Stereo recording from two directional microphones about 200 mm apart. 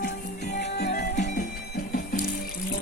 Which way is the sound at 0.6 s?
55° left (ahead or behind).